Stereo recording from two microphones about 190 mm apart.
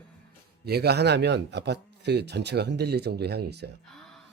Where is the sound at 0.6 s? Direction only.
55° right (ahead or behind).